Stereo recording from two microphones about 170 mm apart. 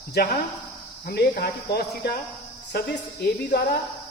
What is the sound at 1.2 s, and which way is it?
Speech, 55° left (ahead or behind).